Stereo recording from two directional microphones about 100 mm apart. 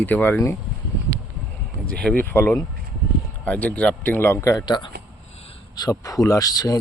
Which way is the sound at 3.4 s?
15° left (ahead or behind).